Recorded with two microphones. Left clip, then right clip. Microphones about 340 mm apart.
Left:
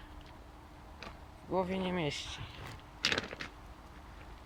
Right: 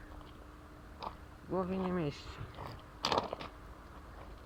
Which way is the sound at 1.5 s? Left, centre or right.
Centre.